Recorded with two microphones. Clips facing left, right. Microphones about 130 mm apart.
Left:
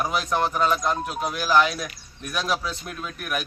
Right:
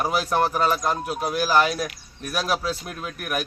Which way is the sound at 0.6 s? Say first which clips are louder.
Even; 5° right (ahead or behind).